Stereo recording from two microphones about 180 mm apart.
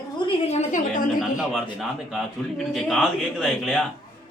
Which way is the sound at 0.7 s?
45° left (ahead or behind).